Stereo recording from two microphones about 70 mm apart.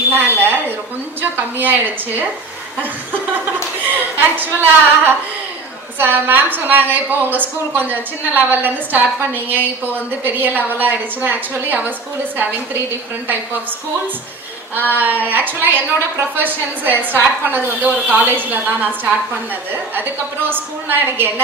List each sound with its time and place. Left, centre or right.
0.1 s a sound: right
1.2 s a woman's voice: right
4.2 s a woman's voice: right
14.9 s a woman's voice: right